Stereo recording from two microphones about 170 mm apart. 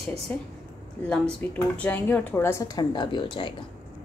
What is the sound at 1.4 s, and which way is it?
A woman's voice, 10° left (ahead or behind).